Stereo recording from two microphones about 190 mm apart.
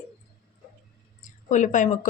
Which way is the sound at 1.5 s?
40° left (ahead or behind).